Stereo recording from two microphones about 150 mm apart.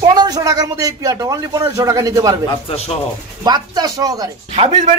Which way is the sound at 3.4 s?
25° right (ahead or behind).